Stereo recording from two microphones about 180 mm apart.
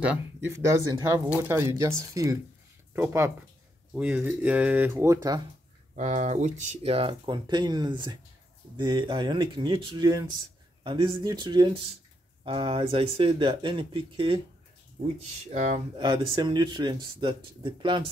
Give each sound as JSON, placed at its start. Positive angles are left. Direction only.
{"t": 0.0, "sound": "speech", "side_deg": -10}
{"t": 5.9, "sound": "speech", "side_deg": -40}
{"t": 15.5, "sound": "speech", "side_deg": -40}
{"t": 16.0, "sound": "speech", "side_deg": -25}